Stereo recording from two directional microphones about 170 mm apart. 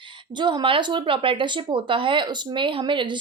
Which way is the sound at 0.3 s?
25° right (ahead or behind).